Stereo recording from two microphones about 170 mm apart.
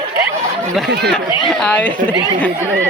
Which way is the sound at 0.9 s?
75° right (ahead or behind).